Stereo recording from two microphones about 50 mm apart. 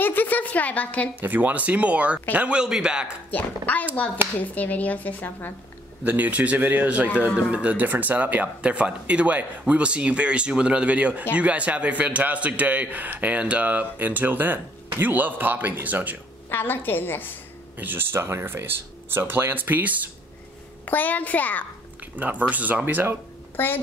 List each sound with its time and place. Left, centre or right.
0.0 s a woman's voice: left
1.2 s a man's voice: right
2.6 s a man's voice: centre
3.3 s a woman's voice: left
6.0 s a man's voice: right
8.5 s a man's voice: right
16.4 s a woman's voice: left
17.7 s speech: right
20.8 s a woman's voice: left
22.1 s a man's voice: right
23.5 s a child's voice: left